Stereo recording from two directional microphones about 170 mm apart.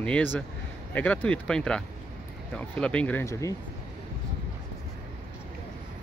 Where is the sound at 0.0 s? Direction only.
10° left (ahead or behind).